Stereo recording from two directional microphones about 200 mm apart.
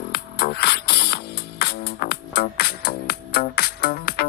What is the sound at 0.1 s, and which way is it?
Music, 50° left (ahead or behind).